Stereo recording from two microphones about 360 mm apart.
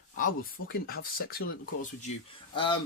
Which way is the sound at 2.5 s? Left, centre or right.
Centre.